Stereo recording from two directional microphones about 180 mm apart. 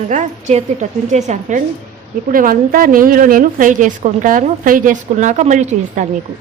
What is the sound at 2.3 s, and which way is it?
A woman's voice, 50° right (ahead or behind).